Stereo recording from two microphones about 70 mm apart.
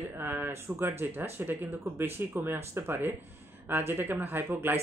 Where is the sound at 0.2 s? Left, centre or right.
Right.